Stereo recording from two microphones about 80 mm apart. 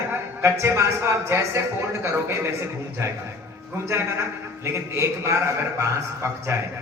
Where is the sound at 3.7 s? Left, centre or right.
Right.